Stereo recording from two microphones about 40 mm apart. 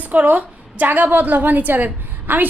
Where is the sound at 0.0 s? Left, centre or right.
Right.